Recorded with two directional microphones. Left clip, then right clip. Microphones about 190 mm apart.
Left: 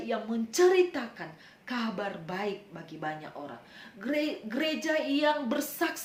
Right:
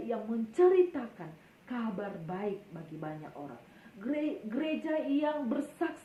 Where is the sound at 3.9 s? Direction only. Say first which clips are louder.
Left 4 dB; 20° left (ahead or behind).